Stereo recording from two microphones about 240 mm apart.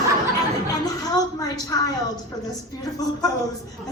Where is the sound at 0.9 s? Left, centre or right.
Centre.